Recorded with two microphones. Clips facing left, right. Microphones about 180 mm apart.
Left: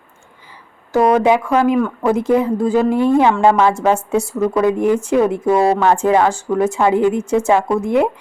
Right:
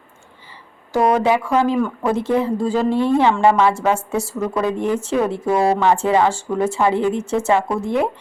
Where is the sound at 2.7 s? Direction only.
10° left (ahead or behind).